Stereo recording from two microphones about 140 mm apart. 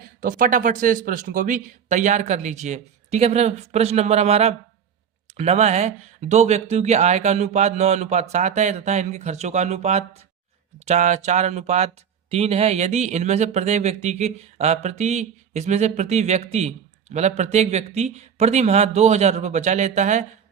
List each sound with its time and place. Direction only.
0.2 s speech: 80° right; by 11.9 s 55° right (ahead or behind)
12.3 s speech: 45° right (ahead or behind)